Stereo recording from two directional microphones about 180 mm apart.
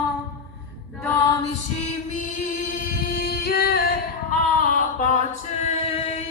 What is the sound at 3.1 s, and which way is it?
Music, 60° left (ahead or behind).